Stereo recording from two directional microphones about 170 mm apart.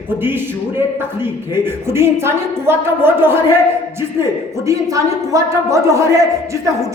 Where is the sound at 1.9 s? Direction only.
15° right (ahead or behind).